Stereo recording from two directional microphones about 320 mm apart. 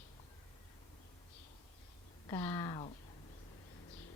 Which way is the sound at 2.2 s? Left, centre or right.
Centre.